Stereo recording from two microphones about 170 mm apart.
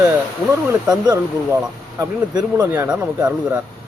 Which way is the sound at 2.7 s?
10° right (ahead or behind).